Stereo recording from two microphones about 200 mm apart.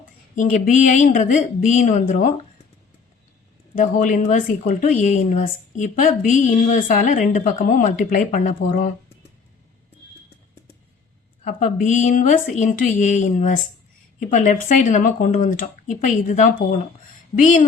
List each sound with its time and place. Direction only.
0.3 s a woman's voice: 40° left (ahead or behind)
3.8 s a woman's voice: 40° left (ahead or behind)
11.4 s a woman's voice: 40° left (ahead or behind)